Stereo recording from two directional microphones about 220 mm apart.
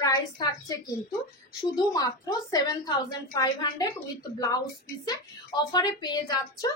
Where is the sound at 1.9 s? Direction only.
15° left (ahead or behind).